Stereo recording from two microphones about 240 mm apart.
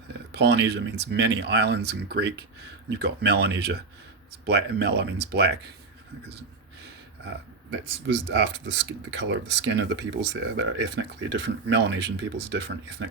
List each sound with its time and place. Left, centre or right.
0.1 s speech: right
8.0 s speech: right